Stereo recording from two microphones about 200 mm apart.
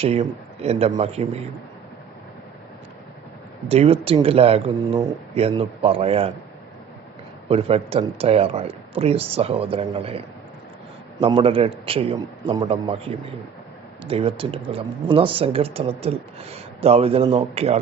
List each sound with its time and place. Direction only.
0.0 s speech: 30° right (ahead or behind)
3.7 s speech: 30° right (ahead or behind)
7.4 s speech: 30° right (ahead or behind)